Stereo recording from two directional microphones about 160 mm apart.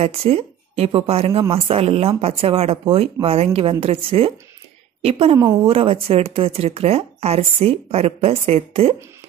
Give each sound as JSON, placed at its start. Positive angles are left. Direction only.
{"t": 0.0, "sound": "speech", "side_deg": -40}